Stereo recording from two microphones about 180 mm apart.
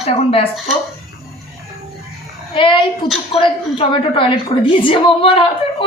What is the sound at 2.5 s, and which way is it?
A woman's voice, 30° left (ahead or behind).